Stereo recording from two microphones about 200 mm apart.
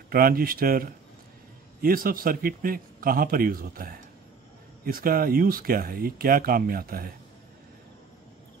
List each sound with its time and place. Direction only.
0.1 s speech: 50° right (ahead or behind)